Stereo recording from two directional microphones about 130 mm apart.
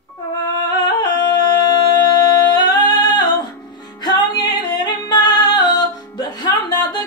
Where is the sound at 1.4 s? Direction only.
35° left (ahead or behind).